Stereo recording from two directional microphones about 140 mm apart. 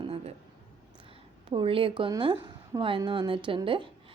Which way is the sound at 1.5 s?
40° right (ahead or behind).